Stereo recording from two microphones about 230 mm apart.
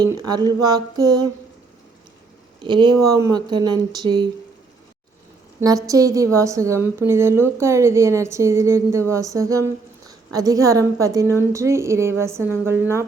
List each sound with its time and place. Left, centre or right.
0.0 s a woman's voice: centre
2.6 s speech: right
5.5 s a woman's voice: centre